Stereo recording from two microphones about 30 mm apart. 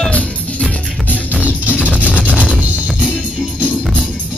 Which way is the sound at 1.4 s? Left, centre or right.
Right.